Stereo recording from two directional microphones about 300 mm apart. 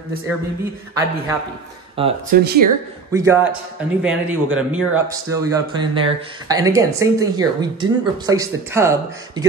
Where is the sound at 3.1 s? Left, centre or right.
Centre.